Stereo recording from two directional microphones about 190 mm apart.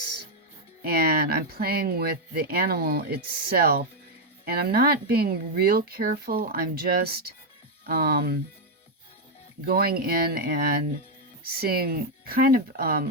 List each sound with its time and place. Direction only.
0.8 s speech: 50° right (ahead or behind)
9.6 s speech: 55° right (ahead or behind)